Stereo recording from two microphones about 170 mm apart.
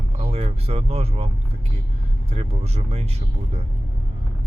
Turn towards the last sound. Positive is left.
turn(degrees=-40)  # may be behind; listen again after turning